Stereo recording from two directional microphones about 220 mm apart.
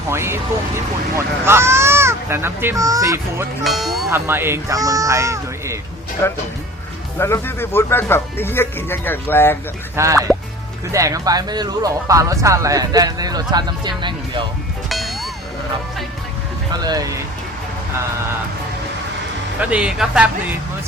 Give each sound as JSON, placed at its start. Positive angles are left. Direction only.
{"t": 0.1, "sound": "speech", "side_deg": -10}
{"t": 3.6, "sound": "speech", "side_deg": 0}
{"t": 4.1, "sound": "speech", "side_deg": -10}
{"t": 6.2, "sound": "speech", "side_deg": 10}
{"t": 9.9, "sound": "speech", "side_deg": -15}
{"t": 14.8, "sound": "music", "side_deg": 0}
{"t": 16.8, "sound": "speech", "side_deg": -15}
{"t": 19.5, "sound": "speech", "side_deg": -5}